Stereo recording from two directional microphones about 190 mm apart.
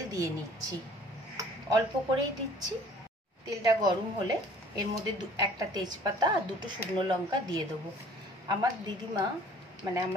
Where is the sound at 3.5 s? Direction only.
20° right (ahead or behind).